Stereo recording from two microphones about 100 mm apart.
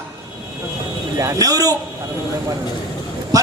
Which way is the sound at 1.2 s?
35° right (ahead or behind).